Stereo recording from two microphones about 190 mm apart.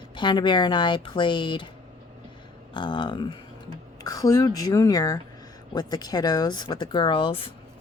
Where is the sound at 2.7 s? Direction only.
25° left (ahead or behind).